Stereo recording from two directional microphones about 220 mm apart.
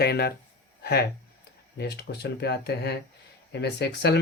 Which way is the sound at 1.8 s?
50° left (ahead or behind).